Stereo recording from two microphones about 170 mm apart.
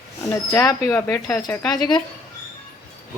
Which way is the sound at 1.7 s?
25° left (ahead or behind).